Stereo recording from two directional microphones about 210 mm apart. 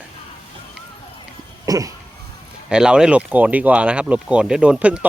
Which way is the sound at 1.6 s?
15° right (ahead or behind).